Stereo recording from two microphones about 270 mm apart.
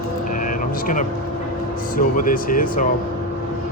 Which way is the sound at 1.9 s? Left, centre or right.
Left.